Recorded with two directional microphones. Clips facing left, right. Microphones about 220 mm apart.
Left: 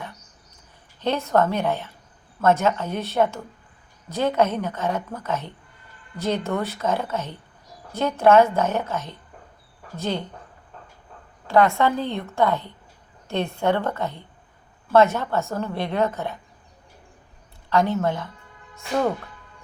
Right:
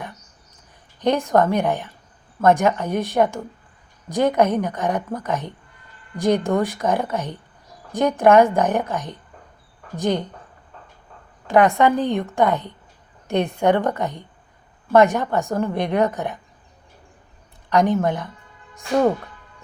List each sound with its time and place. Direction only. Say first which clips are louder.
0.9 s a woman's voice: right 3 dB; 15° right (ahead or behind)
11.4 s a woman's voice: right 3 dB; 15° right (ahead or behind)
17.7 s a woman's voice: right 3 dB; 15° right (ahead or behind)